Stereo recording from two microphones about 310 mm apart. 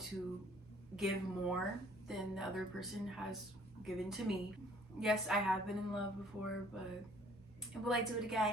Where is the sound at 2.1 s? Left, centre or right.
Centre.